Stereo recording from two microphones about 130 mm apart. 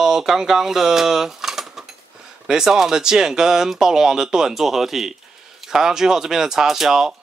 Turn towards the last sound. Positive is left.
turn(degrees=-5)  # may be behind; listen again after turning